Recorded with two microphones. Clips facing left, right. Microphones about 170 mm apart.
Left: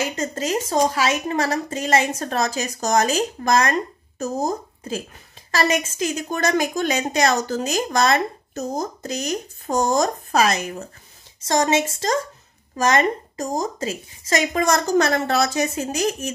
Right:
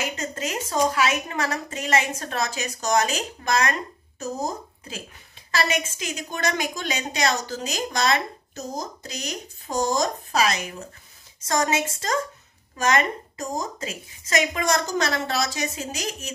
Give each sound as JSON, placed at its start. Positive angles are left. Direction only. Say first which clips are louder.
{"t": 0.2, "sound": "a woman's voice", "louder": "left 6 dB", "side_deg": 35}
{"t": 11.4, "sound": "a woman's voice", "louder": "left 4 dB", "side_deg": 30}